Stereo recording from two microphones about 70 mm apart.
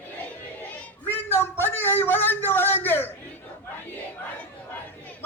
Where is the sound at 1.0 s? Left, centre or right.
Left.